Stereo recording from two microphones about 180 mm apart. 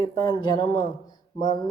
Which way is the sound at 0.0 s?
25° left (ahead or behind).